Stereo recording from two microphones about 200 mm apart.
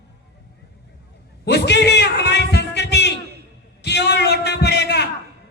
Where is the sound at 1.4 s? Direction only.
55° left (ahead or behind).